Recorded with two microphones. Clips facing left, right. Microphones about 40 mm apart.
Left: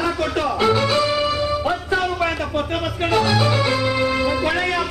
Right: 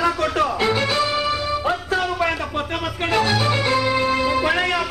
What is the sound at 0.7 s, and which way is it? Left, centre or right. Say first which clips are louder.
Speech: left 2 dB; right.